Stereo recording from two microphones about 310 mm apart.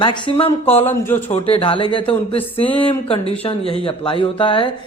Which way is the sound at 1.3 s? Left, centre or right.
Centre.